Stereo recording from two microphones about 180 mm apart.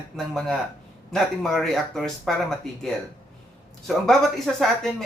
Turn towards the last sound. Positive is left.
turn(degrees=0)  # may be behind; listen again after turning